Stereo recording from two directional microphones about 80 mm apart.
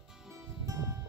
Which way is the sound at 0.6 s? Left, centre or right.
Right.